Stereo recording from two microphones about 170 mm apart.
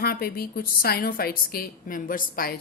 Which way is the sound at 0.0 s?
65° left (ahead or behind).